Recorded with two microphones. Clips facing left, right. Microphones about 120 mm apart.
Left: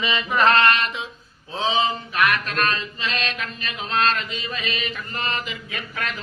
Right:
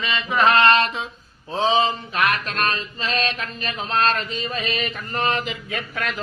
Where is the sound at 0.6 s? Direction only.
30° right (ahead or behind).